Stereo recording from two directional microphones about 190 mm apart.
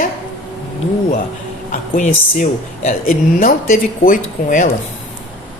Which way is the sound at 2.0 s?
40° left (ahead or behind).